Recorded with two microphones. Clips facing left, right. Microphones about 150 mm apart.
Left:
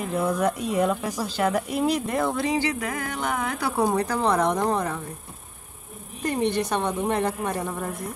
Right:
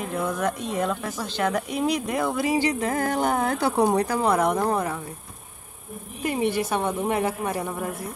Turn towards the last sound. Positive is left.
turn(degrees=-5)  # may be behind; listen again after turning